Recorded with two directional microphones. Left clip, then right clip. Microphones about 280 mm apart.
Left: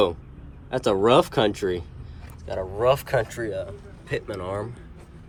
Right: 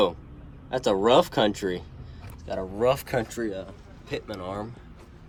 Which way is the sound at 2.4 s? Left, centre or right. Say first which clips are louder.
Left 2 dB; centre.